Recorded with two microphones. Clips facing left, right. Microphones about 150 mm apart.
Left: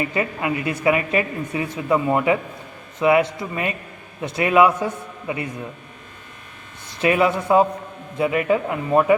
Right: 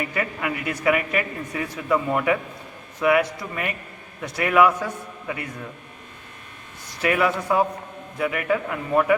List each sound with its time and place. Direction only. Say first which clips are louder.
0.0 s a man's voice: left 3 dB; 25° left (ahead or behind)
7.0 s a man's voice: left 3 dB; 25° left (ahead or behind)